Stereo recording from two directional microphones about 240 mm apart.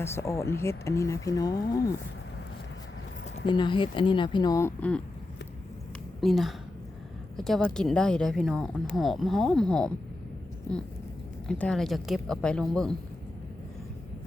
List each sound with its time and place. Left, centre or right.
0.0 s speech: centre
3.4 s speech: centre
6.1 s a woman's voice: centre
11.4 s speech: centre